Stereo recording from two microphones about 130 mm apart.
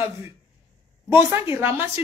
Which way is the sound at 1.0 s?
20° right (ahead or behind).